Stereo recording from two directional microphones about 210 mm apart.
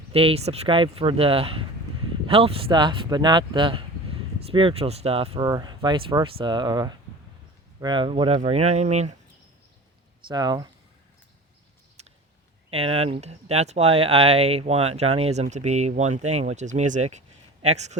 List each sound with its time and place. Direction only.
0.1 s speech: 25° right (ahead or behind)
10.2 s speech: 20° right (ahead or behind)
12.0 s a sound: 30° right (ahead or behind)
12.7 s speech: 30° right (ahead or behind)